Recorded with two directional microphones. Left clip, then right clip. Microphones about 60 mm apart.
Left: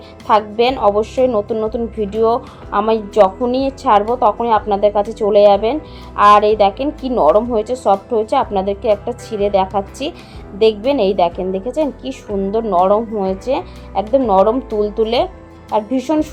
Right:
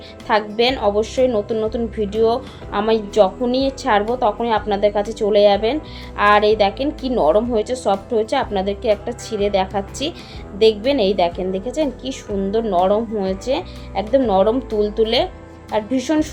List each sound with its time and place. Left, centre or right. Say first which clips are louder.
0.3 s speech: left 4 dB; left